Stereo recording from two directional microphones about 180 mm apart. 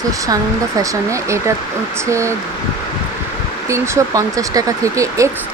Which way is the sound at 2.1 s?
15° right (ahead or behind).